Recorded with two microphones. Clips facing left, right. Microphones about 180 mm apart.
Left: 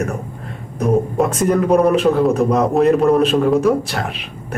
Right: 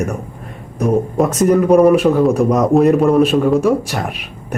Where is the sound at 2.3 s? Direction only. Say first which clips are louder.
Right 2 dB; 10° right (ahead or behind).